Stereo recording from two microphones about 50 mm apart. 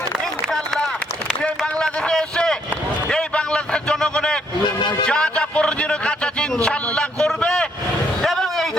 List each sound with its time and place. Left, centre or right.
1.4 s a sound: centre
5.0 s music: centre
6.6 s a man's voice: centre
8.2 s vehicle: centre